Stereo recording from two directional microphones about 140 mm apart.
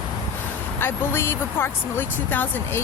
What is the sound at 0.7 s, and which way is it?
Speech, 15° left (ahead or behind).